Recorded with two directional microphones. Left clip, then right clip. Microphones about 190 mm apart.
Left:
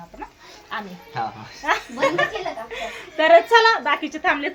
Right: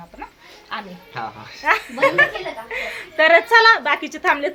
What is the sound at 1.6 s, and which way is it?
A woman's voice, 15° right (ahead or behind).